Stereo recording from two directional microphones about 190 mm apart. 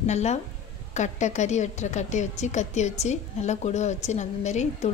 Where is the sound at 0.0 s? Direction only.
35° left (ahead or behind).